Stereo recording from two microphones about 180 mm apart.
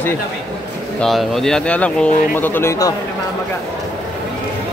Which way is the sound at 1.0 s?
Centre (ahead or behind).